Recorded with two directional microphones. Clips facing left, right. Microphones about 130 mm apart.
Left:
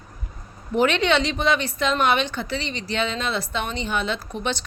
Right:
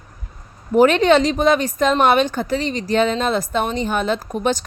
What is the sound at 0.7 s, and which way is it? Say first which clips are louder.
Speech: right 7 dB; 40° right (ahead or behind).